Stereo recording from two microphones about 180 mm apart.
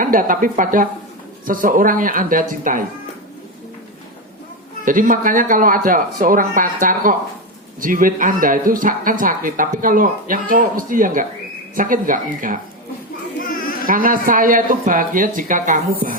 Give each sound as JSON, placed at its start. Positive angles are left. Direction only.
{"t": 0.0, "sound": "speech", "side_deg": -50}
{"t": 4.9, "sound": "speech", "side_deg": -50}
{"t": 13.5, "sound": "a sound", "side_deg": 50}
{"t": 13.8, "sound": "speech", "side_deg": -50}